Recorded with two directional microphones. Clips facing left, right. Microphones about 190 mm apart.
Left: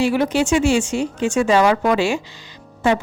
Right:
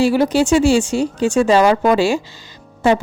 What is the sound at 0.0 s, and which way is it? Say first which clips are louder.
Speech: right 3 dB; 35° right (ahead or behind).